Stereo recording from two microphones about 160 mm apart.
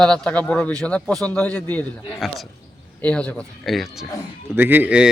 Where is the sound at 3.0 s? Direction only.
10° left (ahead or behind).